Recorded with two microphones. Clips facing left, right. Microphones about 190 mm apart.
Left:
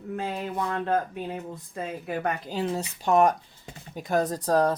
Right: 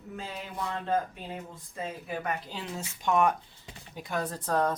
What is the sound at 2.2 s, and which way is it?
Speech, 40° left (ahead or behind).